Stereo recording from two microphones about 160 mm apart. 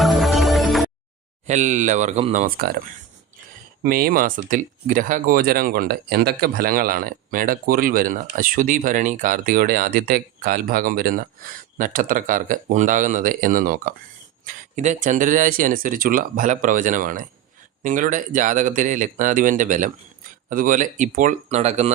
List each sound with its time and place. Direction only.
0.0 s music: centre (ahead or behind)
1.5 s speech: 50° right (ahead or behind); by 2.8 s 70° right (ahead or behind)
3.8 s speech: 65° right (ahead or behind)
14.4 s speech: 50° right (ahead or behind)